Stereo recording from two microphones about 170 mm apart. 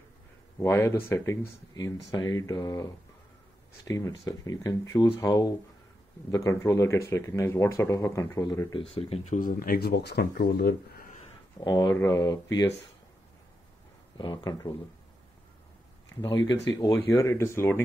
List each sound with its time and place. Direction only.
0.6 s speech: 15° left (ahead or behind)
8.9 s speech: 40° left (ahead or behind); by 11.1 s 65° left (ahead or behind)
11.6 s speech: 20° left (ahead or behind)
14.1 s speech: 25° left (ahead or behind)
16.2 s speech: 25° left (ahead or behind)